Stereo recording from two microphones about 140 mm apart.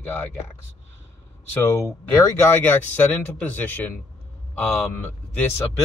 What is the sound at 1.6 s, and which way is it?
A man's voice, 20° left (ahead or behind).